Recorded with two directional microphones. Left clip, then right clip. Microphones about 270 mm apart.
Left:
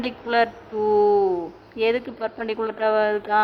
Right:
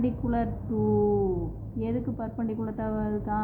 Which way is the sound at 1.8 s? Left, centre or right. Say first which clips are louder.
Left 10 dB; left.